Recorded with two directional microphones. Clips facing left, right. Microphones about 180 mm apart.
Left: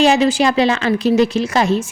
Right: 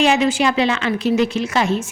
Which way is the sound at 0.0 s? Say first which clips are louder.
Left 3 dB; 35° left (ahead or behind).